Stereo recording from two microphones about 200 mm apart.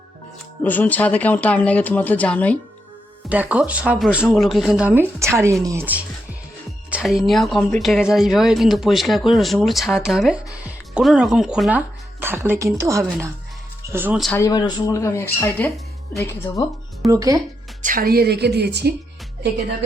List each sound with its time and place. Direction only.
0.6 s speech: 10° left (ahead or behind)
3.2 s speech: 5° right (ahead or behind)
14.3 s speech: 20° left (ahead or behind)
17.1 s speech: 15° right (ahead or behind)
17.8 s a woman's voice: 45° right (ahead or behind)